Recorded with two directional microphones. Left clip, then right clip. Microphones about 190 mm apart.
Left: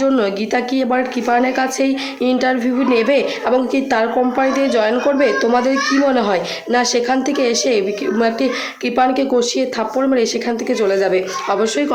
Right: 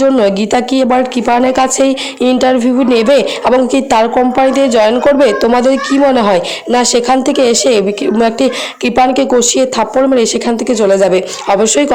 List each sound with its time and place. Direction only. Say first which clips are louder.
0.0 s a woman's voice: right 7 dB; 30° right (ahead or behind)